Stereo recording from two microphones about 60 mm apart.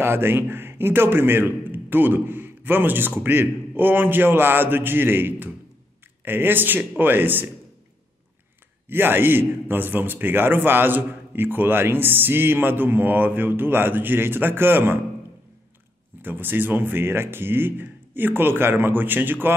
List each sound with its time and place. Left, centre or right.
0.0 s a man's voice: right
8.8 s a man's voice: right
16.2 s a man's voice: right